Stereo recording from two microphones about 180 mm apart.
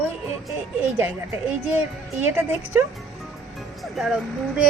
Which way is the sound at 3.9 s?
5° right (ahead or behind).